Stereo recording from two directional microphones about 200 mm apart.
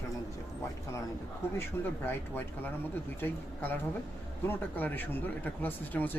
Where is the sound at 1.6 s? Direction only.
10° left (ahead or behind).